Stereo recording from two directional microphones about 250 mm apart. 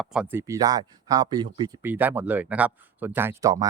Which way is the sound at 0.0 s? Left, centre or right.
Centre.